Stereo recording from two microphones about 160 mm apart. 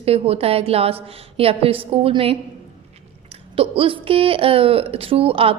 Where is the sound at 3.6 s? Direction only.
35° right (ahead or behind).